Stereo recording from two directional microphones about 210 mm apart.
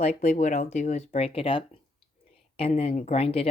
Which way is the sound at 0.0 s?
30° left (ahead or behind).